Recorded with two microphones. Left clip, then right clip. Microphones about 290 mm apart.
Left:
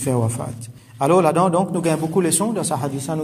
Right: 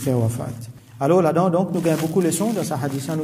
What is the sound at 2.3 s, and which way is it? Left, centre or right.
Speech, left.